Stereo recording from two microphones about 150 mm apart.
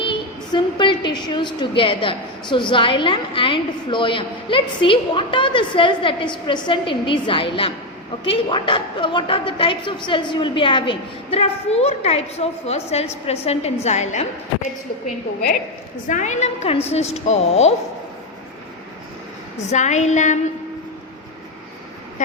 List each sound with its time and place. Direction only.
0.0 s a woman's voice: 35° left (ahead or behind); by 14.3 s 50° left (ahead or behind)
16.0 s a woman's voice: 55° left (ahead or behind)
19.5 s a woman's voice: 50° left (ahead or behind)